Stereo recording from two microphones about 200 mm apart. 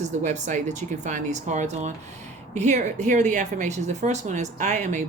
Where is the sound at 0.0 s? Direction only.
40° right (ahead or behind).